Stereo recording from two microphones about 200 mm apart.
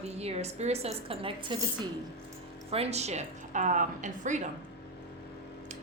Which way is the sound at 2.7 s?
30° right (ahead or behind).